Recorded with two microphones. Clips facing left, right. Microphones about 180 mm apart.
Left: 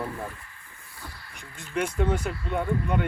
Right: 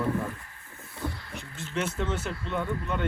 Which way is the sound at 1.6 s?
15° left (ahead or behind).